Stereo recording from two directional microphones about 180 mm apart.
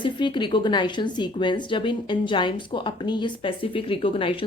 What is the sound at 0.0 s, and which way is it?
A woman's voice, 25° left (ahead or behind).